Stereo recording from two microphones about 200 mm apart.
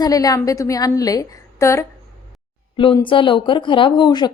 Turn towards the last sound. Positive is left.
turn(degrees=20)  # may be behind; listen again after turning